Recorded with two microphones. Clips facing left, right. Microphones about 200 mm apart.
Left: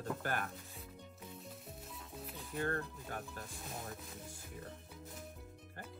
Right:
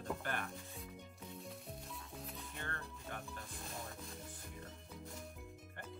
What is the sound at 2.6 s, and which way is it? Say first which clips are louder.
Music: left 13 dB; 40° left (ahead or behind).